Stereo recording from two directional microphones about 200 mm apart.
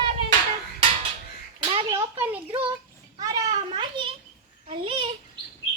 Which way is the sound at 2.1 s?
10° right (ahead or behind).